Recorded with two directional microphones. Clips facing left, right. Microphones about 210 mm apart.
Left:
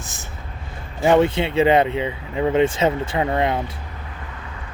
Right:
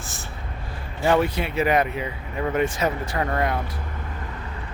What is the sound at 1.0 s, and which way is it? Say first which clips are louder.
Speech: left 5 dB; 25° left (ahead or behind).